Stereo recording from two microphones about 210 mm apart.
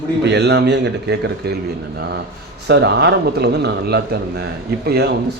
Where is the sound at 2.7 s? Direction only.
55° right (ahead or behind).